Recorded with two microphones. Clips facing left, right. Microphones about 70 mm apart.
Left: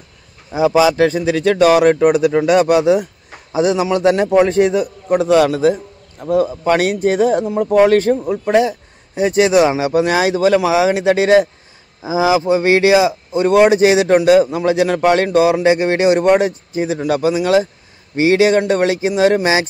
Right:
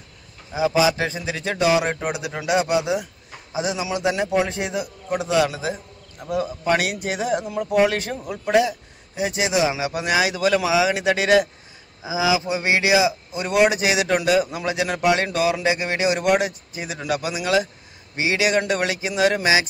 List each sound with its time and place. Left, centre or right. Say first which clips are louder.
0.5 s speech: left 6 dB; left
6.2 s speech: left 8 dB; left